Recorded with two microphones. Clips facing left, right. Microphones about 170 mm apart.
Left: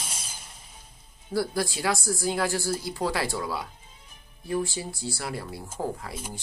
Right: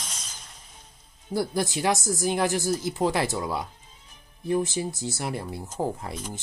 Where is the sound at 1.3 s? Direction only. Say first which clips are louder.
Right 1 dB; 20° right (ahead or behind).